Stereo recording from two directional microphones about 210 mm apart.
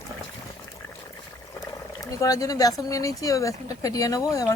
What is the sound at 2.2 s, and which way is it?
Speech, 15° left (ahead or behind).